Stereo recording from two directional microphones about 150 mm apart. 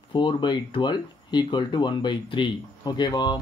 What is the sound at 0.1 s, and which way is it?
Speech, 30° left (ahead or behind).